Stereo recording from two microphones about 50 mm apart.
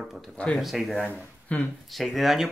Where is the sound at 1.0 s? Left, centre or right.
Left.